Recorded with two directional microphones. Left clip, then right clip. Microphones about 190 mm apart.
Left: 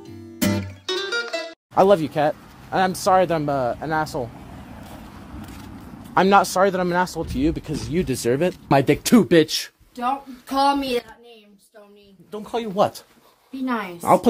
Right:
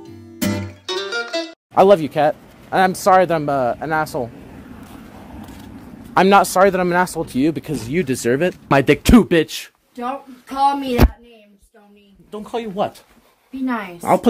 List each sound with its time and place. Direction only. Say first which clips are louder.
0.0 s music: even; centre (ahead or behind)
1.7 s speech: right 4 dB; 25° right (ahead or behind)
6.1 s speech: right 4 dB; 35° right (ahead or behind)
8.0 s speech: right 3 dB; 20° right (ahead or behind)
9.3 s speech: even; centre (ahead or behind)
10.5 s speech: right 2 dB; 45° left (ahead or behind)
12.3 s speech: right 1 dB; 10° right (ahead or behind)
12.7 s speech: left 4 dB; 15° left (ahead or behind)
13.7 s speech: right 1 dB; centre (ahead or behind)